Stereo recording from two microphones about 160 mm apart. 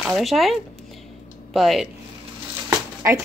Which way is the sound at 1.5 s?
Centre (ahead or behind).